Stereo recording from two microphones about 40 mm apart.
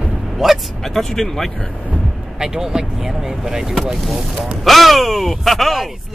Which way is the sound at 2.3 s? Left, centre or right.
Centre.